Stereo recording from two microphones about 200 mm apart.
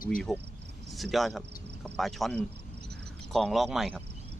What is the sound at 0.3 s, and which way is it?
Speech, centre (ahead or behind).